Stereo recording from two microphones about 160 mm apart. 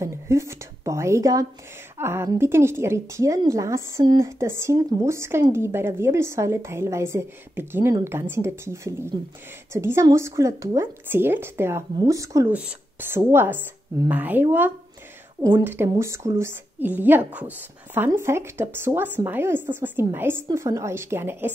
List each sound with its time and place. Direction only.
0.0 s a woman's voice: 15° right (ahead or behind)